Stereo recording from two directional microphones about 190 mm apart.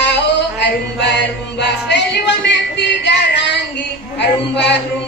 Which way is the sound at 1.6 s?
65° left (ahead or behind).